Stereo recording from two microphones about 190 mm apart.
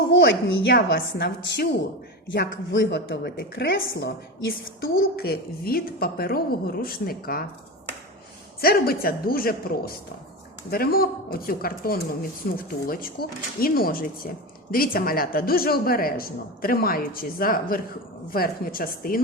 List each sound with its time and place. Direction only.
0.1 s a woman's voice: 65° left (ahead or behind)
4.8 s a woman's voice: 55° left (ahead or behind)
8.6 s a woman's voice: 55° left (ahead or behind)